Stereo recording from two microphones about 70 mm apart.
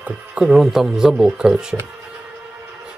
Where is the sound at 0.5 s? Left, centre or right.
Centre.